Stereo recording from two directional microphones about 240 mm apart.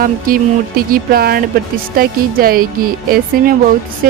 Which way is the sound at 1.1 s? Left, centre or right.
Right.